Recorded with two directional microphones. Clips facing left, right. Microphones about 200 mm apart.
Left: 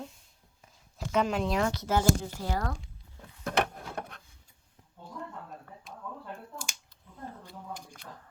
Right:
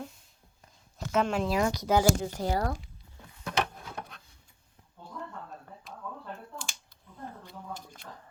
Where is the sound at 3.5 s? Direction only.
60° left (ahead or behind).